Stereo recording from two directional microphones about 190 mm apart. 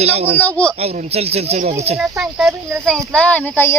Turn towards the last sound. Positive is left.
turn(degrees=10)  # may be behind; listen again after turning